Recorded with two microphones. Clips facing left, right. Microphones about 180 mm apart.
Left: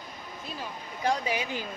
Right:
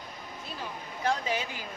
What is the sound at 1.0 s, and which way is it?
Speech, 15° left (ahead or behind).